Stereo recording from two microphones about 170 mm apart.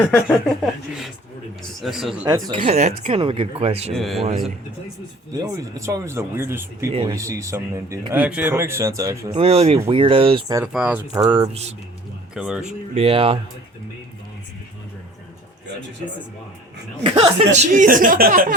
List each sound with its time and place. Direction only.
0.1 s speech: centre (ahead or behind)
2.2 s speech: 25° right (ahead or behind)
2.7 s speech: 40° right (ahead or behind)
3.9 s speech: centre (ahead or behind)
5.3 s speech: 20° right (ahead or behind)
9.3 s speech: 35° right (ahead or behind)
10.7 s speech: 5° right (ahead or behind)
11.1 s speech: 25° right (ahead or behind)
12.3 s speech: 5° right (ahead or behind)
12.9 s speech: 35° right (ahead or behind)
17.0 s speech: 30° right (ahead or behind); by 18.5 s 55° right (ahead or behind)